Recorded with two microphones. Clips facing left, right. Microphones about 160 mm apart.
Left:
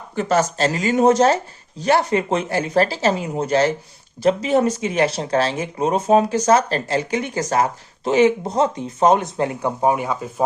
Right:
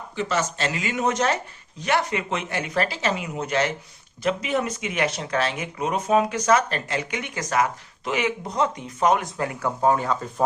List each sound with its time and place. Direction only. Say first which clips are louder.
0.2 s speech: left 7 dB; 40° left (ahead or behind); by 10.4 s 10° left (ahead or behind)